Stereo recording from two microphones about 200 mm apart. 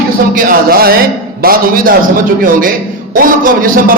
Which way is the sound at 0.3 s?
45° right (ahead or behind).